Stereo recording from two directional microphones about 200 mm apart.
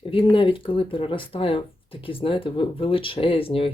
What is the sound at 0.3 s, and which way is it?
Speech, 25° left (ahead or behind).